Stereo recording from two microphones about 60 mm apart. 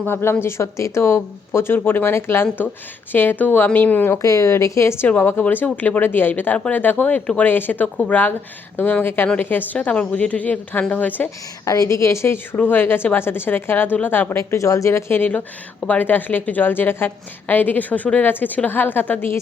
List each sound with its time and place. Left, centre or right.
0.0 s a woman's voice: left
4.2 s a woman's voice: left
5.0 s a woman's voice: left
9.7 s speech: centre
11.6 s speech: left
12.5 s a woman's voice: left
14.3 s speech: left
15.2 s a woman's voice: left